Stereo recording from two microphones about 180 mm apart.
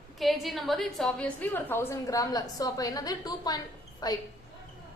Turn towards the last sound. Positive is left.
turn(degrees=20)  # may be behind; listen again after turning